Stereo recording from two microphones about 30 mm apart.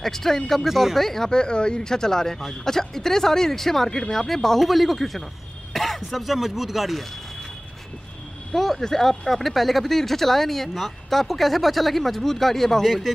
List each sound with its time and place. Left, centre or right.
0.0 s speech: centre
1.3 s speech: left; by 7.0 s centre
8.5 s speech: centre
12.8 s speech: centre